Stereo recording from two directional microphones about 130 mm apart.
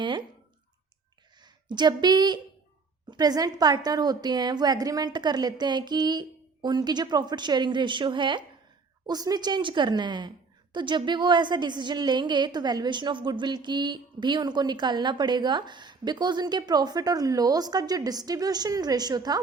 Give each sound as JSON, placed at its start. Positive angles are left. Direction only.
{"t": 0.0, "sound": "speech", "side_deg": -35}
{"t": 1.4, "sound": "a woman's voice", "side_deg": -35}